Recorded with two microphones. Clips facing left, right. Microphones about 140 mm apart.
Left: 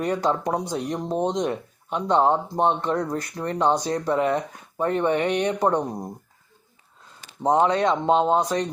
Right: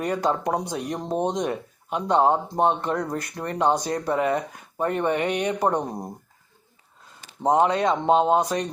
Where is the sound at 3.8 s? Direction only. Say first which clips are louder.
Left 1 dB; 45° right (ahead or behind).